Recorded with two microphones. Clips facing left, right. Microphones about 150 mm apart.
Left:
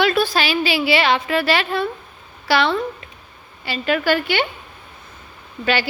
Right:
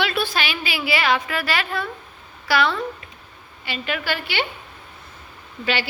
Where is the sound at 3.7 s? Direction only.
40° left (ahead or behind).